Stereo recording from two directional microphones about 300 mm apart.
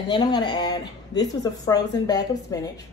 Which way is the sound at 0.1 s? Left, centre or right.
Centre.